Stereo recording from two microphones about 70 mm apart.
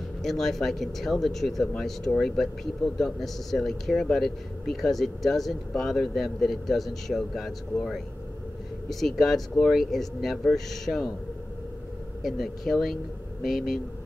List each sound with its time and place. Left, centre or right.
0.2 s speech: centre
12.2 s speech: centre